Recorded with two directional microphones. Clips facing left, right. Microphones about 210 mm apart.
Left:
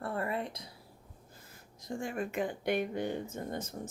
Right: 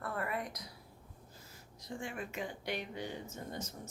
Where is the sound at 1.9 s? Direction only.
45° left (ahead or behind).